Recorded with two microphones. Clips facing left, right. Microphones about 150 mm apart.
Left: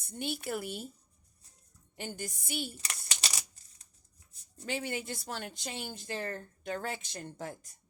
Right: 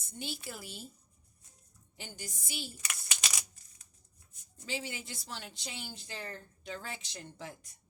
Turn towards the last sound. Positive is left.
turn(degrees=45)  # may be behind; listen again after turning